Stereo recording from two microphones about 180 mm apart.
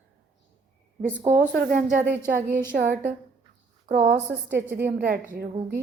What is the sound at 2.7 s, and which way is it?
Speech, 60° right (ahead or behind).